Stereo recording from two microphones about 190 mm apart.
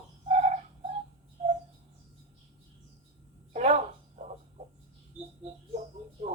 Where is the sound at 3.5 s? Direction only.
35° right (ahead or behind).